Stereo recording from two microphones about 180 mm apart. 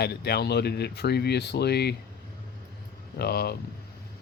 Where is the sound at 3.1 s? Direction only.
60° left (ahead or behind).